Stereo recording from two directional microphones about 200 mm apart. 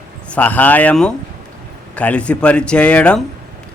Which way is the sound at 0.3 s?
5° left (ahead or behind).